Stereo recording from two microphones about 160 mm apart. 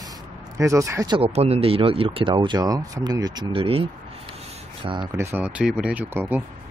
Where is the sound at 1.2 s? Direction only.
40° right (ahead or behind).